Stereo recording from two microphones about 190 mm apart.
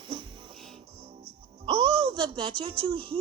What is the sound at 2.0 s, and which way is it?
Speech, 30° right (ahead or behind).